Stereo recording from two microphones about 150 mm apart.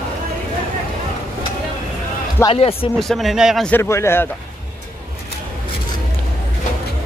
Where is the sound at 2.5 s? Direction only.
40° left (ahead or behind).